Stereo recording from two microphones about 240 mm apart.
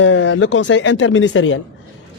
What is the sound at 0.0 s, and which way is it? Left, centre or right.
Speech, left.